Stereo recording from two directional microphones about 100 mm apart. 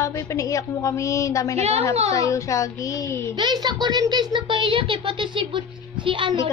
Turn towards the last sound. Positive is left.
turn(degrees=-55)  # may be behind; listen again after turning